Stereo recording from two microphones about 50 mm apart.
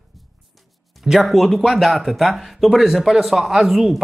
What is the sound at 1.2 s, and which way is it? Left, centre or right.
Speech, centre.